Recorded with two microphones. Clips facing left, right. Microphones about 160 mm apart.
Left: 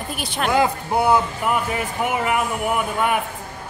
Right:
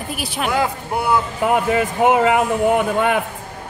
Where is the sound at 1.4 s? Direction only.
90° right.